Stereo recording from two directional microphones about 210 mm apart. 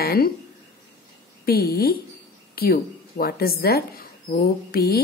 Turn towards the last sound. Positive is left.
turn(degrees=45)  # may be behind; listen again after turning